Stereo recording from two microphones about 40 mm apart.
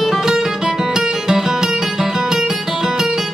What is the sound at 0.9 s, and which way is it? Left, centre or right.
Music, centre.